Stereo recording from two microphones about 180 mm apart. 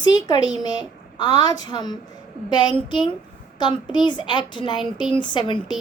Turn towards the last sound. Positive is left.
turn(degrees=25)  # may be behind; listen again after turning